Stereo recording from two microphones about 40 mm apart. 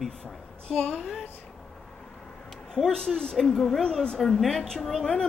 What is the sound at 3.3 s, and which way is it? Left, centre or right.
A woman's voice, centre.